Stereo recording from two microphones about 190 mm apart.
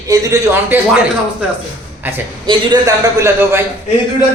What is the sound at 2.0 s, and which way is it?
Speech, 10° right (ahead or behind).